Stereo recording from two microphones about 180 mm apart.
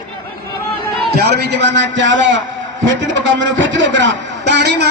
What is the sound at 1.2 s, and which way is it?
A man's voice, 70° right (ahead or behind).